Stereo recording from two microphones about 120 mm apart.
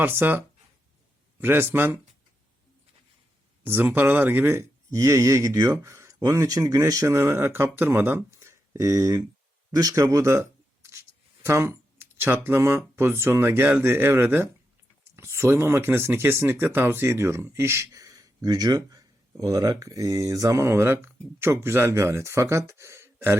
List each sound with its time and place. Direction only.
0.0 s speech: 20° right (ahead or behind)
3.6 s speech: 15° right (ahead or behind)
11.4 s speech: 20° right (ahead or behind)